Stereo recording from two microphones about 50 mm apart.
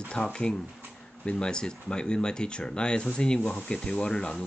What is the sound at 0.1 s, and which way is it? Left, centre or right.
Speech, centre.